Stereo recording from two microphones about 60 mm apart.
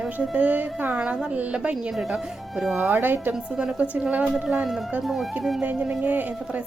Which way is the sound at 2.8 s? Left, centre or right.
Right.